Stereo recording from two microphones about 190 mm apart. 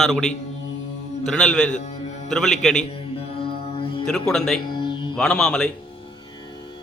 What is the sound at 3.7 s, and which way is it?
Music, 30° left (ahead or behind).